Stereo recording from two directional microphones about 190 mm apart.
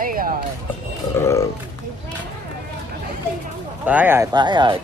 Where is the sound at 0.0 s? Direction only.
50° right (ahead or behind).